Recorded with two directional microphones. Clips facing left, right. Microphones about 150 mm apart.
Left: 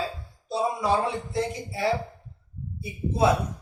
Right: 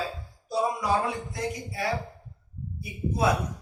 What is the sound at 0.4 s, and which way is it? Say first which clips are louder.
Speech: left 1 dB; 25° left (ahead or behind).